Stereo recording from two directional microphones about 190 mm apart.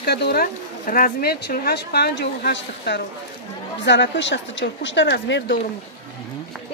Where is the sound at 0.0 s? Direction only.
55° left (ahead or behind).